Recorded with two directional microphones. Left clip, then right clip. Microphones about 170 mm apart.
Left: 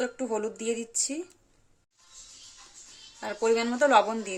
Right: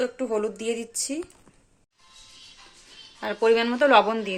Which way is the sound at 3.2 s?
5° left (ahead or behind).